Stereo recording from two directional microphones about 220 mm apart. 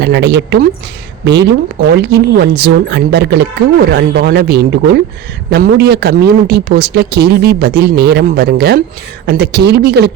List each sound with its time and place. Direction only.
0.0 s a man's voice: 50° right (ahead or behind)